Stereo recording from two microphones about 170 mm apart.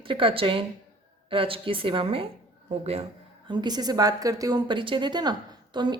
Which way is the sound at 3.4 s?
25° right (ahead or behind).